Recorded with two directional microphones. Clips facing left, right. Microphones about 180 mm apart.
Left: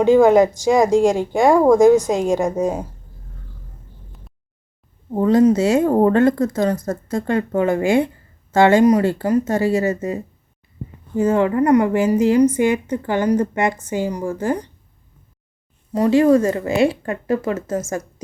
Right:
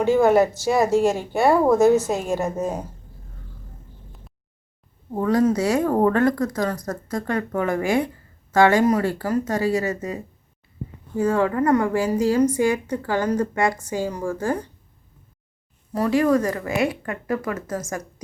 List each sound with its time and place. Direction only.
0.0 s speech: 15° left (ahead or behind)
5.1 s a woman's voice: 20° left (ahead or behind)
11.2 s a woman's voice: 20° left (ahead or behind)
15.9 s a woman's voice: 20° left (ahead or behind)